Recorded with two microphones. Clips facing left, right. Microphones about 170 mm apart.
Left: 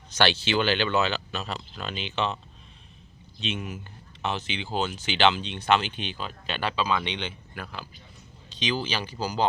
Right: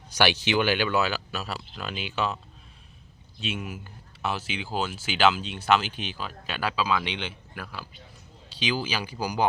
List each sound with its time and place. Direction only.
0.2 s speech: 15° right (ahead or behind)
3.4 s speech: 5° right (ahead or behind)